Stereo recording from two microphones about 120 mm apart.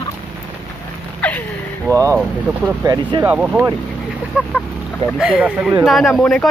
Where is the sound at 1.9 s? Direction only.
25° right (ahead or behind).